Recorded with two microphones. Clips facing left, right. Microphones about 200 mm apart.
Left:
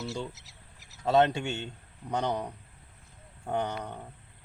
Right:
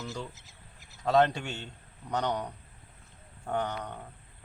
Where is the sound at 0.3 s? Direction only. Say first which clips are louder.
Right 1 dB; 75° left (ahead or behind).